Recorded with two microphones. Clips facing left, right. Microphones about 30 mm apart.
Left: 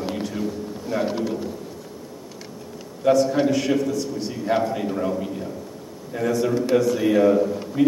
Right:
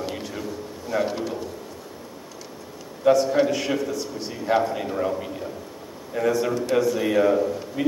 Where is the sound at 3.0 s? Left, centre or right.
Centre.